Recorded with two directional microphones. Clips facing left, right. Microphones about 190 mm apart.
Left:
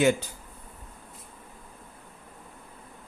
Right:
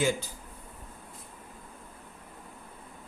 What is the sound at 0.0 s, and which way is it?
Speech, 65° left (ahead or behind).